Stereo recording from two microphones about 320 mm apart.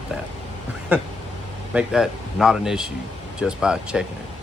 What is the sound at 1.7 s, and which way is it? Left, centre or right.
Speech, centre.